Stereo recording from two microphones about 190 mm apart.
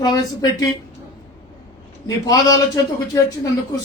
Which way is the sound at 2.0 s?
20° left (ahead or behind).